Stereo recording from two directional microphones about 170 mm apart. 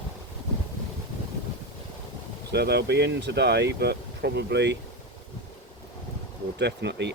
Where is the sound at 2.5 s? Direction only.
75° right (ahead or behind).